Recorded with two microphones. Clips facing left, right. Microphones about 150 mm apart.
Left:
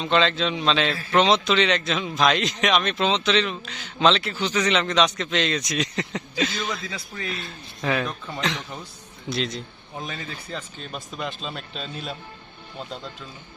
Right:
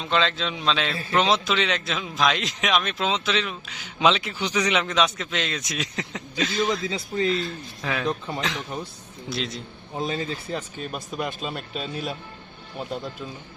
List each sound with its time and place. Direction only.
0.0 s a man's voice: centre (ahead or behind)
6.7 s speech: 25° right (ahead or behind)
7.4 s a man's voice: centre (ahead or behind)
10.0 s speech: 30° right (ahead or behind)
10.5 s speech: 5° right (ahead or behind)